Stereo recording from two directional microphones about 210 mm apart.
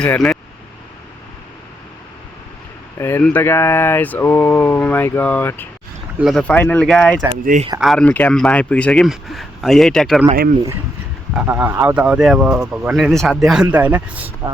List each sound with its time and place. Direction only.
0.0 s speech: 5° left (ahead or behind)
3.0 s a sound: 10° left (ahead or behind)
6.1 s speech: centre (ahead or behind)
7.4 s speech: 35° right (ahead or behind)
7.8 s speech: centre (ahead or behind)
11.3 s a man's voice: 10° right (ahead or behind)